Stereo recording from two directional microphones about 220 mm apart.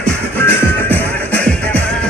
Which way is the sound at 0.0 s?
10° left (ahead or behind).